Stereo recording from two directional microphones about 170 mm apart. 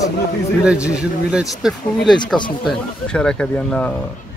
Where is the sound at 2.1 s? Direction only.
25° left (ahead or behind).